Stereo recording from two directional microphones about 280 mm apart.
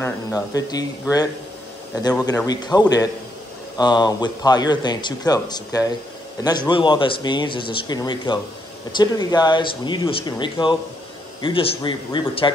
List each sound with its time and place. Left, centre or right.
0.0 s speech: centre